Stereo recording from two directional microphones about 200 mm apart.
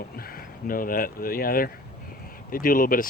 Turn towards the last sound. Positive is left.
turn(degrees=45)  # may be behind; listen again after turning